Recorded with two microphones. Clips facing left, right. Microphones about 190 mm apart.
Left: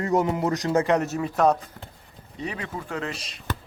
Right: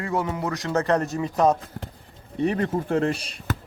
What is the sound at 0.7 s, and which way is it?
Speech, 10° left (ahead or behind).